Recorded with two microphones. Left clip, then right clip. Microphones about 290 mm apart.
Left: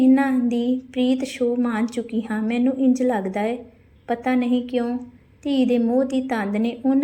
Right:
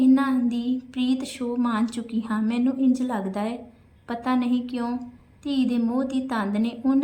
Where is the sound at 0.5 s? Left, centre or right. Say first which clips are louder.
Left 5 dB; left.